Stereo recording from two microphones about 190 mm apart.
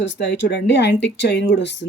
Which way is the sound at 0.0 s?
70° left (ahead or behind).